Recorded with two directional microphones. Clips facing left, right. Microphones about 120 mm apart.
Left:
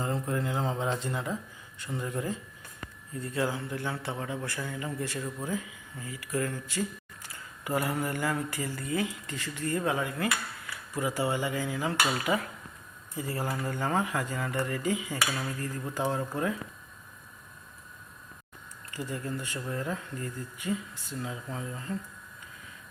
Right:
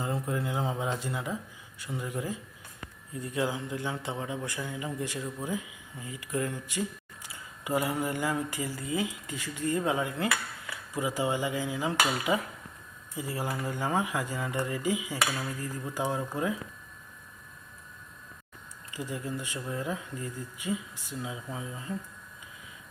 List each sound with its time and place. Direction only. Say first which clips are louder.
0.0 s a man's voice: left 1 dB; 10° right (ahead or behind)
18.9 s a man's voice: even; 15° right (ahead or behind)